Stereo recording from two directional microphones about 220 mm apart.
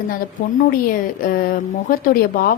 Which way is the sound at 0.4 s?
40° left (ahead or behind).